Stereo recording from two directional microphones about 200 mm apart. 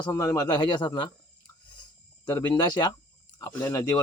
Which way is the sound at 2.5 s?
20° left (ahead or behind).